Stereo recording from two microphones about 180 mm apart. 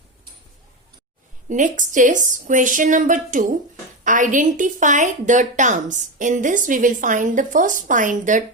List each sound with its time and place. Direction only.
1.5 s a woman's voice: 45° right (ahead or behind)